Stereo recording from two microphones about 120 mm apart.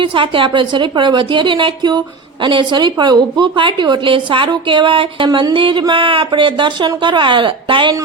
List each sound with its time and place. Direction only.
0.0 s a woman's voice: 45° right (ahead or behind)